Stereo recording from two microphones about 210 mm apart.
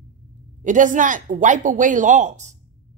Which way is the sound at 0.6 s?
40° right (ahead or behind).